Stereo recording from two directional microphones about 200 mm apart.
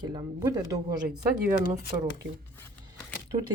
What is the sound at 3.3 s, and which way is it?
Speech, 30° right (ahead or behind).